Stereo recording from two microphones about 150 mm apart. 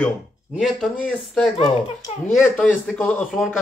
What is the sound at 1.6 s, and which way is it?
Speech, 30° left (ahead or behind).